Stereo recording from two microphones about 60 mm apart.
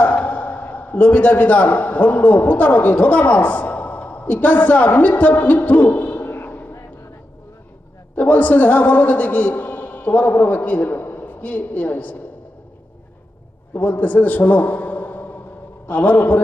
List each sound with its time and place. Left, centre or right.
0.0 s a man's voice: left
8.1 s a man's voice: left
13.7 s a man's voice: left